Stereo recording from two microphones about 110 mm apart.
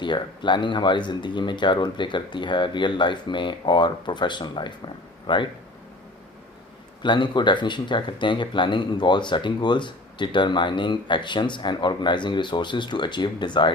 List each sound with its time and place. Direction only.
0.0 s speech: 45° left (ahead or behind)
7.0 s speech: 45° left (ahead or behind)